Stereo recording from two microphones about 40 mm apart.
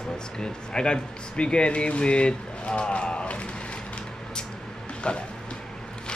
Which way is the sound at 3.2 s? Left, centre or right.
Left.